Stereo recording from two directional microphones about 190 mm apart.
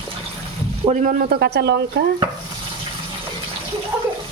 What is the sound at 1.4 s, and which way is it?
Speech, 60° right (ahead or behind).